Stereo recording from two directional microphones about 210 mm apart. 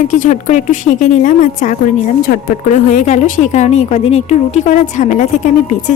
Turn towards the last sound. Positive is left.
turn(degrees=35)  # may be behind; listen again after turning